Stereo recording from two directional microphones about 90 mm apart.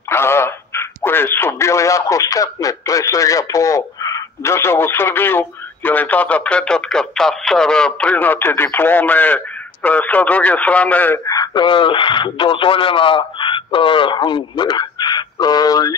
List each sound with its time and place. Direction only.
0.1 s a man's voice: 25° left (ahead or behind)
11.2 s a sound: 45° left (ahead or behind)
11.6 s speech: 70° left (ahead or behind); by 16.0 s 45° left (ahead or behind)